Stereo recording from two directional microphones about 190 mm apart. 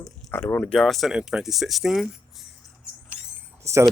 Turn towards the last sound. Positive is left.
turn(degrees=-15)  # may be behind; listen again after turning